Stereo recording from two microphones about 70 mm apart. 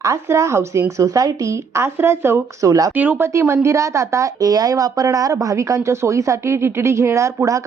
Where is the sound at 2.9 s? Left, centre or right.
Right.